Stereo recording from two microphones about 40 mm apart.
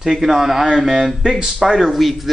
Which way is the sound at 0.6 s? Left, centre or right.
Centre.